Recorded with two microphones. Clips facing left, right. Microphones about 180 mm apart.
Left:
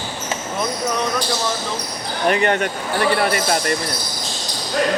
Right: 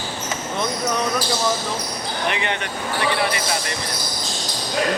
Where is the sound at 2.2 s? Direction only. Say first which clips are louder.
Left 9 dB; 45° left (ahead or behind).